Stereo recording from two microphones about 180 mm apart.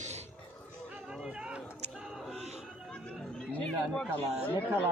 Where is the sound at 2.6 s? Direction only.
5° left (ahead or behind).